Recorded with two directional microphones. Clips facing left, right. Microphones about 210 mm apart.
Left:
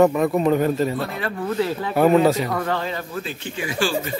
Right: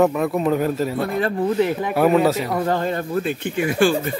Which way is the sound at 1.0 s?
50° right (ahead or behind).